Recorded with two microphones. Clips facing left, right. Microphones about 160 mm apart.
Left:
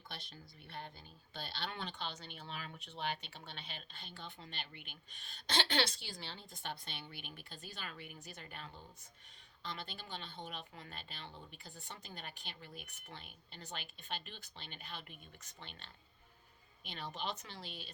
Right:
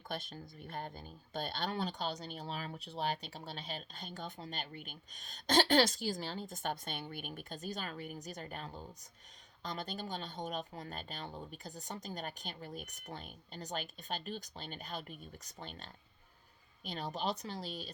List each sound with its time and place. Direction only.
0.1 s speech: 50° right (ahead or behind)